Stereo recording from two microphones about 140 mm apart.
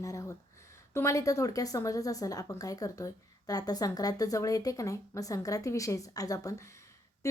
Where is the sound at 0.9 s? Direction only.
20° left (ahead or behind).